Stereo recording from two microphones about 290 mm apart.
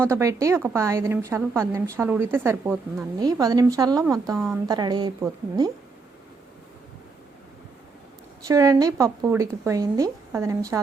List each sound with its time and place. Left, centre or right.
0.0 s a woman's voice: centre
8.4 s a woman's voice: centre